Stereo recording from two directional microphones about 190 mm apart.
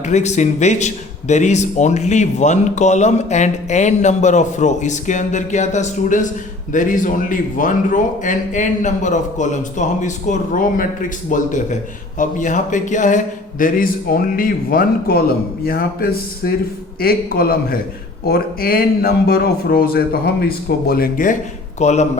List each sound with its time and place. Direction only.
0.0 s a man's voice: 35° left (ahead or behind)
21.8 s speech: 35° left (ahead or behind)